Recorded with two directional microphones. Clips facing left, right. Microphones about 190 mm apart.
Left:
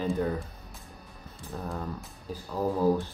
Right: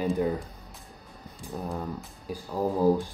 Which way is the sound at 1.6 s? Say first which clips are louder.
Right 2 dB; 15° right (ahead or behind).